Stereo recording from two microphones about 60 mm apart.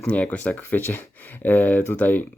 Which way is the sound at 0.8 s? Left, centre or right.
Left.